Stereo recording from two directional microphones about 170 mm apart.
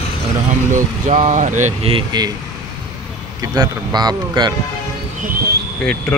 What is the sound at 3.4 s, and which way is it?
A man's voice, 25° right (ahead or behind).